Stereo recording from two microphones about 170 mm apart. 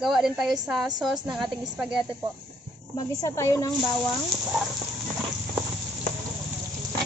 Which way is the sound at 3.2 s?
20° left (ahead or behind).